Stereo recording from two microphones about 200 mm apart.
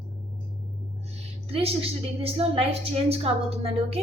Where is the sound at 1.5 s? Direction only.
30° right (ahead or behind).